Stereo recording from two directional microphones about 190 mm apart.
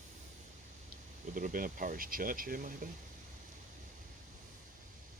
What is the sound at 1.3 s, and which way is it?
Speech, 45° right (ahead or behind).